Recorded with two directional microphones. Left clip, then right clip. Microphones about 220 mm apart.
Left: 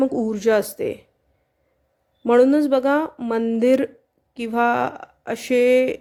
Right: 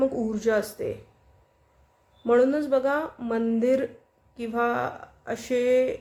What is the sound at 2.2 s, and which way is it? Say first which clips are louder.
Speech: left 6 dB; 35° left (ahead or behind).